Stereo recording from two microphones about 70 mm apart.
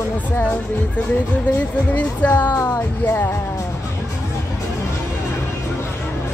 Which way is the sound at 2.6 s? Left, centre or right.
Left.